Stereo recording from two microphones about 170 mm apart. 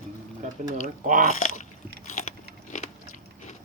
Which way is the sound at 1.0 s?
50° right (ahead or behind).